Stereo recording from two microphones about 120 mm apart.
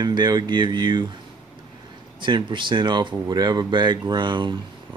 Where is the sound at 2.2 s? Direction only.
40° right (ahead or behind).